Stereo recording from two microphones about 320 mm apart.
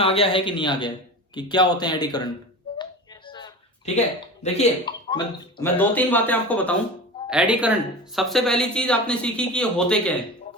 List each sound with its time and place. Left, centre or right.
0.0 s a man's voice: centre
2.7 s music: centre
3.2 s a sound: centre
4.4 s speech: centre